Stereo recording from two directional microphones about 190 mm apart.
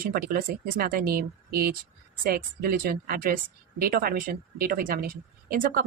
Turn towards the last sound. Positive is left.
turn(degrees=-50)  # may be behind; listen again after turning